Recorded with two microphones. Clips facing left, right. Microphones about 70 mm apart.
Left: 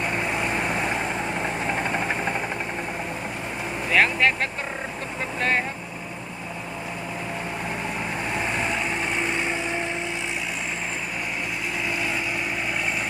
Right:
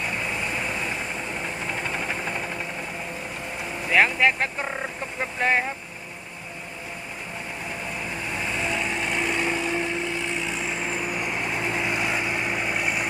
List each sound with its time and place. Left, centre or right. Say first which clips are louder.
0.5 s vehicle: left 4 dB; left
1.7 s vehicle: left 2 dB; left
3.9 s speech: right 1 dB; centre
11.9 s light engine: right 1 dB; centre